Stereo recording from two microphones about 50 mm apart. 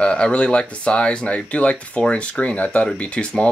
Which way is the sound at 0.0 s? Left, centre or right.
Left.